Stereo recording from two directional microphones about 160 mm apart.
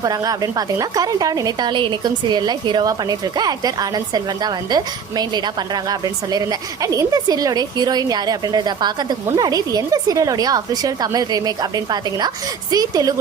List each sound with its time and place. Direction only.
0.0 s a woman's voice: 25° right (ahead or behind)